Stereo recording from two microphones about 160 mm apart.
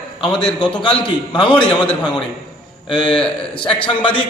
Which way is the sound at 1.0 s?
30° left (ahead or behind).